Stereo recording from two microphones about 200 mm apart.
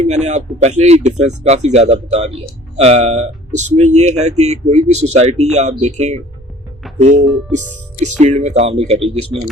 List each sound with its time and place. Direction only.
0.1 s speech: 35° right (ahead or behind)